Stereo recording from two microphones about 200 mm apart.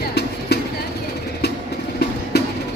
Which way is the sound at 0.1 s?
55° left (ahead or behind).